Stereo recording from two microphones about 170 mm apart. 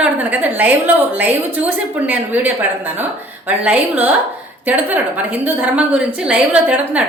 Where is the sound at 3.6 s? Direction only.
10° right (ahead or behind).